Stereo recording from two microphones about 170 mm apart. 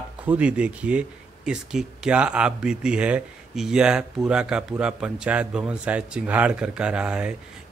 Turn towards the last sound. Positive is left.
turn(degrees=-5)  # may be behind; listen again after turning